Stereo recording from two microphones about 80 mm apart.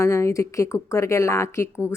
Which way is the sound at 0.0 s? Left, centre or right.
Left.